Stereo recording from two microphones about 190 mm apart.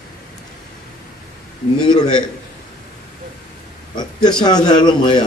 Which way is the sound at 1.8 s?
20° left (ahead or behind).